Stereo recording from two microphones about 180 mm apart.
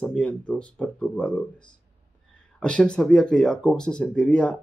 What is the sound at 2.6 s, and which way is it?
Speech, 5° left (ahead or behind).